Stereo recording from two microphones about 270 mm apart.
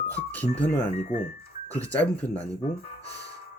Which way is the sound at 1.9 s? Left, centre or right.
Centre.